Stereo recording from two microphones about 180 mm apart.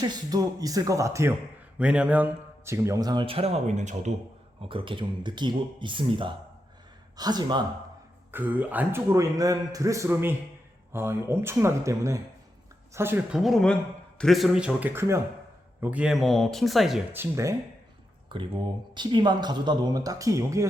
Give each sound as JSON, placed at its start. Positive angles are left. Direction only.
{"t": 0.0, "sound": "speech", "side_deg": -20}
{"t": 4.6, "sound": "speech", "side_deg": -30}
{"t": 8.3, "sound": "a man's voice", "side_deg": -10}
{"t": 17.2, "sound": "a man's voice", "side_deg": -15}
{"t": 18.3, "sound": "speech", "side_deg": -25}